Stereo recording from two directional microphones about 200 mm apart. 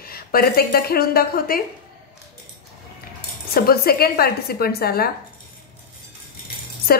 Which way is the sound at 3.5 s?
50° left (ahead or behind).